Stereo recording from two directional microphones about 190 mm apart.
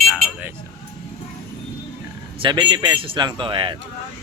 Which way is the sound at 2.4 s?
25° right (ahead or behind).